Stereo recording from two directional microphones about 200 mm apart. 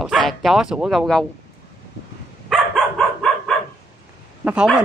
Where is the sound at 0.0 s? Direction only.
Centre (ahead or behind).